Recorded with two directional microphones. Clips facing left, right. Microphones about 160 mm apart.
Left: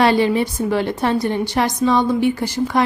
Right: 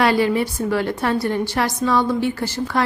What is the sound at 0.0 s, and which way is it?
A woman's voice, 25° left (ahead or behind).